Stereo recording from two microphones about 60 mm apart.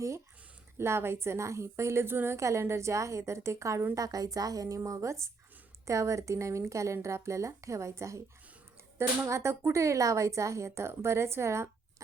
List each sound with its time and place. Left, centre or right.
0.8 s speech: right
2.0 s a woman's voice: right
2.4 s speech: right
3.9 s a woman's voice: right
4.8 s speech: right